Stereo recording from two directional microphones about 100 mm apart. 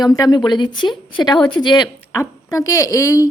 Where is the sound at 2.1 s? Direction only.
35° left (ahead or behind).